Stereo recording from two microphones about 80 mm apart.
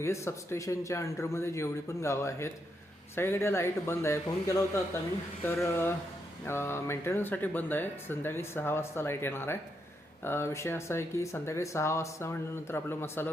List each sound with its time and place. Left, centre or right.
0.0 s a man's voice: left
5.6 s a man's voice: left